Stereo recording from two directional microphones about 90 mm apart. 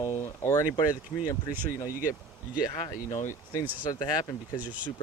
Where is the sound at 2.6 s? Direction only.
45° left (ahead or behind).